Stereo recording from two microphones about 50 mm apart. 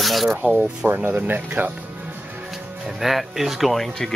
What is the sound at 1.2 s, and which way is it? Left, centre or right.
Speech, right.